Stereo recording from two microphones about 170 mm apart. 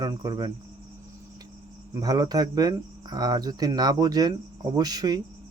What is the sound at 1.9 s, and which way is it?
Speech, 20° right (ahead or behind).